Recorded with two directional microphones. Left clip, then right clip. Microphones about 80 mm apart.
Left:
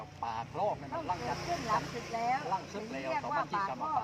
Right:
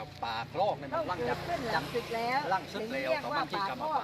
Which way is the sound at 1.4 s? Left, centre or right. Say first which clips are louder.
Even; centre.